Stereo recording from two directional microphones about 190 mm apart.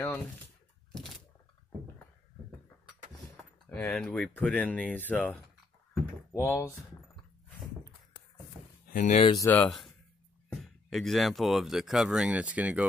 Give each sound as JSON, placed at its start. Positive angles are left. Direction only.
{"t": 3.6, "sound": "speech", "side_deg": 10}
{"t": 8.9, "sound": "speech", "side_deg": 40}
{"t": 9.2, "sound": "speech", "side_deg": 25}
{"t": 9.5, "sound": "speech", "side_deg": 5}